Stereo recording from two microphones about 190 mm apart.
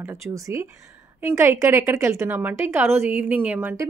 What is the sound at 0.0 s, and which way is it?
Speech, 15° right (ahead or behind).